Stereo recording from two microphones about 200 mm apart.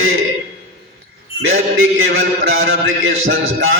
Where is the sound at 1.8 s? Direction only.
85° right.